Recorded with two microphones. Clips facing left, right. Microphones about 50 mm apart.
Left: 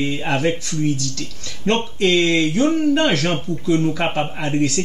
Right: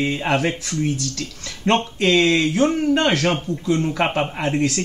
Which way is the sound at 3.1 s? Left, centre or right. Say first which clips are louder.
Even; centre.